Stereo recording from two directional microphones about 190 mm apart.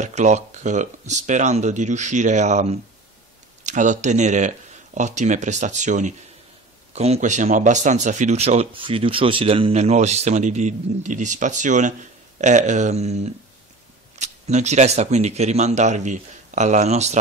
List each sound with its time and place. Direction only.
0.0 s speech: 40° right (ahead or behind)